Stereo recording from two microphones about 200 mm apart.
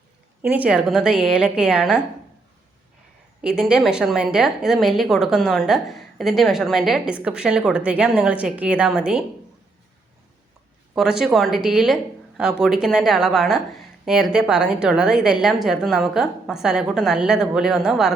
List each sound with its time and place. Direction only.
0.4 s a woman's voice: 5° right (ahead or behind)
3.4 s a woman's voice: 5° right (ahead or behind)
10.9 s a woman's voice: centre (ahead or behind)